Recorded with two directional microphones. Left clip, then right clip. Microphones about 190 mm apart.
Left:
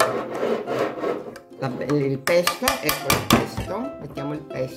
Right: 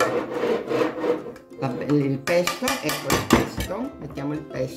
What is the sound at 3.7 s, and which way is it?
Speech, 15° left (ahead or behind).